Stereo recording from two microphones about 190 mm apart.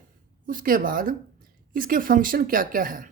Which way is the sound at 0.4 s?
45° right (ahead or behind).